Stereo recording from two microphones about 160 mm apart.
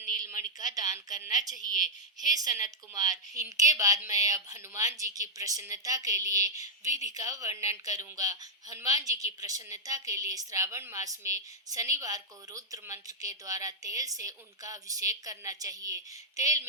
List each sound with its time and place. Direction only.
0.0 s a woman's voice: 20° right (ahead or behind)